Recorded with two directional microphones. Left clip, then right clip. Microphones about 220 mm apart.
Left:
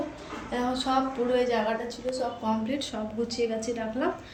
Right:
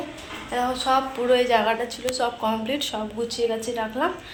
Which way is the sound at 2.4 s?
5° left (ahead or behind).